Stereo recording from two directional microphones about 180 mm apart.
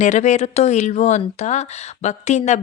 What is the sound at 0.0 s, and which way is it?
Speech, 40° left (ahead or behind).